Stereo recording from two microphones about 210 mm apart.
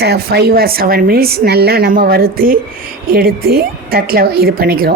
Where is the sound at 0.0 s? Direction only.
50° right (ahead or behind).